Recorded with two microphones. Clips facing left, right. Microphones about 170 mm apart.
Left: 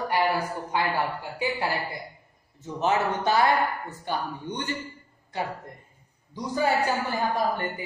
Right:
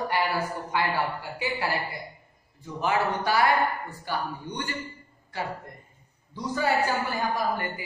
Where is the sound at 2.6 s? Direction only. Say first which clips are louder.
Left 1 dB; 20° left (ahead or behind).